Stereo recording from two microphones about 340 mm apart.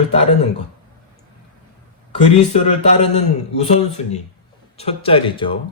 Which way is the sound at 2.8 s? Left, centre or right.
Centre.